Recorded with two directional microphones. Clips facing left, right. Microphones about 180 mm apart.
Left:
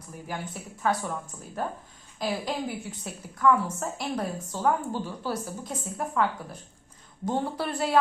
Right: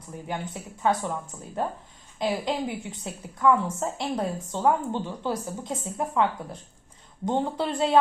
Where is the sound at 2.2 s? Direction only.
20° right (ahead or behind).